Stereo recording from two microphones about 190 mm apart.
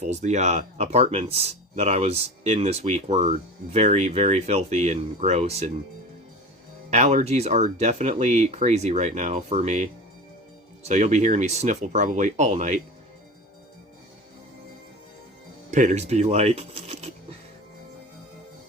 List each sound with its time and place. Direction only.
0.0 s speech: 35° right (ahead or behind)
6.9 s speech: 40° right (ahead or behind)
15.7 s speech: 40° right (ahead or behind)